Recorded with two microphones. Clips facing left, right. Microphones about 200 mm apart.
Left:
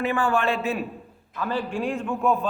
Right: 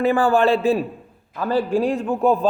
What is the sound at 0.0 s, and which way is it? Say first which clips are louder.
A man's voice: right 7 dB; 35° right (ahead or behind).